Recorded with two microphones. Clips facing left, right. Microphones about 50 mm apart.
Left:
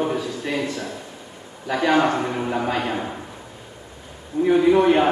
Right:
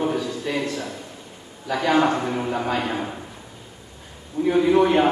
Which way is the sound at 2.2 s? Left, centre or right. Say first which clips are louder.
Left 1 dB; centre.